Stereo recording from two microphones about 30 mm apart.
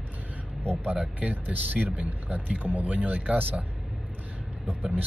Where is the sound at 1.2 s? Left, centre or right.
Right.